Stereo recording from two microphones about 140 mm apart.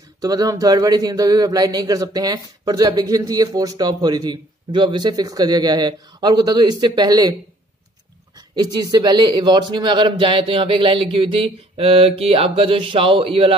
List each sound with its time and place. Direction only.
0.2 s speech: 25° right (ahead or behind)
8.4 s a man's voice: 30° right (ahead or behind)